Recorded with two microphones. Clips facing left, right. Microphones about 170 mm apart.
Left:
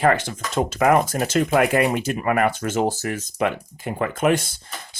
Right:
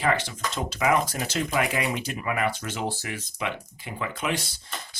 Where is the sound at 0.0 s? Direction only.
50° left (ahead or behind).